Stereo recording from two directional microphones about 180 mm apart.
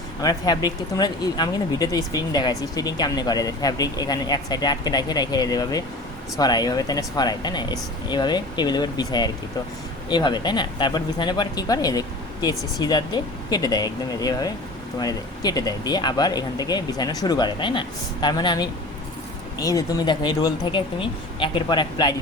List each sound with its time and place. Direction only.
0.2 s speech: 20° left (ahead or behind)